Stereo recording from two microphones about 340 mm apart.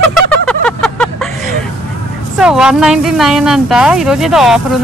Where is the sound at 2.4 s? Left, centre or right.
Centre.